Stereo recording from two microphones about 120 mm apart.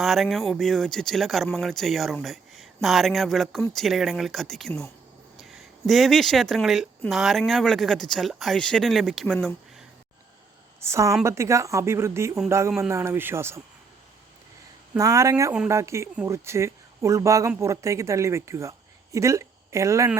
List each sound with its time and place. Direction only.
0.0 s speech: centre (ahead or behind)
10.8 s a woman's voice: 25° right (ahead or behind)
14.9 s a woman's voice: 25° right (ahead or behind)